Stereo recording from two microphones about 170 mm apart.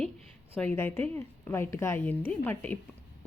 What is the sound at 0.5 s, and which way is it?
Speech, 10° left (ahead or behind).